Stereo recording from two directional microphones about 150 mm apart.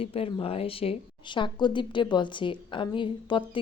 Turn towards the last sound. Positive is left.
turn(degrees=35)  # may be behind; listen again after turning